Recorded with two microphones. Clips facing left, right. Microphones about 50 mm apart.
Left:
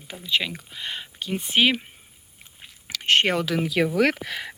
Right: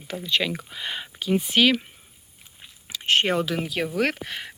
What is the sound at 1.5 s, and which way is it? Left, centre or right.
Speech, left.